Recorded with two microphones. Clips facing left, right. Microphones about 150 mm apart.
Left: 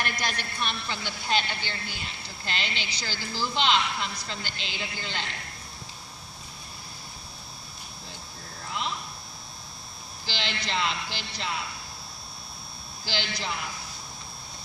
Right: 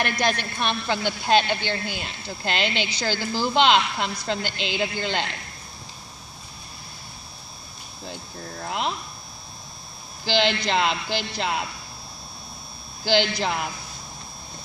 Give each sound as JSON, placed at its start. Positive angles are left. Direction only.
{"t": 0.0, "sound": "a woman's voice", "side_deg": -70}
{"t": 8.6, "sound": "a sound", "side_deg": -65}
{"t": 10.2, "sound": "speech", "side_deg": -70}
{"t": 11.3, "sound": "speech", "side_deg": -90}
{"t": 13.1, "sound": "speech", "side_deg": -65}